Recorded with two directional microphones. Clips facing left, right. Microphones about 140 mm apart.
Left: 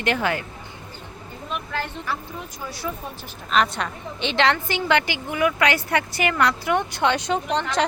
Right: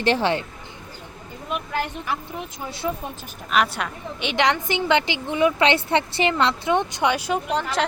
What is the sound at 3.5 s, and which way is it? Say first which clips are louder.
A woman's voice: even; 5° right (ahead or behind).